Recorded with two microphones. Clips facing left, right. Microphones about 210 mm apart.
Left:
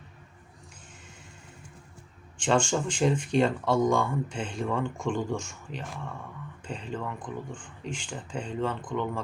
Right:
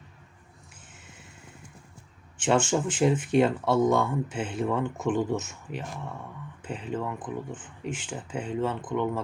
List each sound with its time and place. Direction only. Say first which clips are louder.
2.4 s speech: right 1 dB; 5° right (ahead or behind)